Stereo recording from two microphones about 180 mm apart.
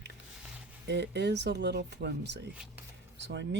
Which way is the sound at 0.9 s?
70° right (ahead or behind).